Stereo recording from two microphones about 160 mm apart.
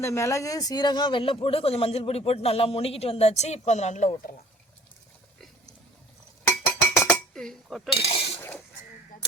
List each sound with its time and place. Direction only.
0.0 s speech: 15° left (ahead or behind); by 4.2 s 45° left (ahead or behind)
6.4 s music: 15° left (ahead or behind)
7.3 s dishes: 5° left (ahead or behind)
7.9 s speech: 35° left (ahead or behind)
8.4 s speech: 10° left (ahead or behind)